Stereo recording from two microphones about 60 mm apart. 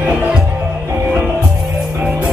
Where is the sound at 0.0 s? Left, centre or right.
Right.